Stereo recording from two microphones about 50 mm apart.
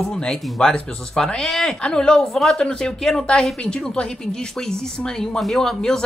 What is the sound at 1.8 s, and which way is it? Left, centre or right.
A woman's voice, centre.